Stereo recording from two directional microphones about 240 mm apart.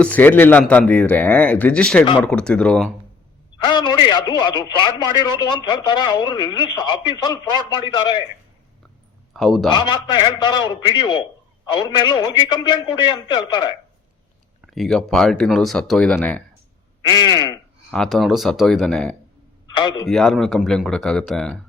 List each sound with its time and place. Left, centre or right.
0.0 s a man's voice: centre
3.6 s a man's voice: centre
9.3 s speech: centre
9.7 s a man's voice: centre
14.7 s speech: centre
17.1 s a man's voice: centre
17.9 s speech: centre
19.7 s a man's voice: centre
20.1 s speech: centre